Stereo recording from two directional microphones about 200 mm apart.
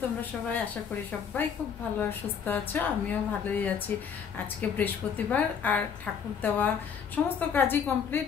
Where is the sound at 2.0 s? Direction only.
10° left (ahead or behind).